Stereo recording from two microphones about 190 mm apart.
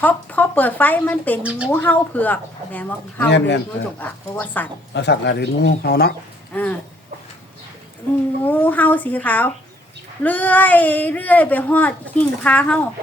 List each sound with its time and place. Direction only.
0.0 s speech: 10° left (ahead or behind)
1.4 s speech: 5° right (ahead or behind)
1.7 s speech: 10° left (ahead or behind)
3.2 s speech: 65° left (ahead or behind)
4.3 s speech: 10° left (ahead or behind)
4.9 s speech: 65° left (ahead or behind)
6.5 s speech: 10° left (ahead or behind)
8.4 s speech: 10° left (ahead or behind)